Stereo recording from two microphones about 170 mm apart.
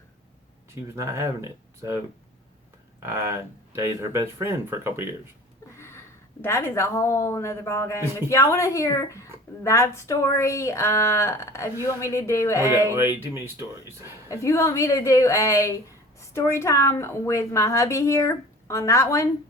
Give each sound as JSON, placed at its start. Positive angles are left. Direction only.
{"t": 0.9, "sound": "speech", "side_deg": -15}
{"t": 3.0, "sound": "speech", "side_deg": -15}
{"t": 5.7, "sound": "a sound", "side_deg": 15}
{"t": 6.4, "sound": "a woman's voice", "side_deg": 15}
{"t": 13.2, "sound": "speech", "side_deg": -15}
{"t": 14.3, "sound": "a woman's voice", "side_deg": 15}